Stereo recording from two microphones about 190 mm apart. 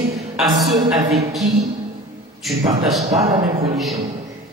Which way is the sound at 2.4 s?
Centre (ahead or behind).